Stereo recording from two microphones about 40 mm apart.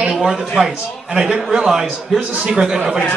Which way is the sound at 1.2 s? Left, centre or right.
Right.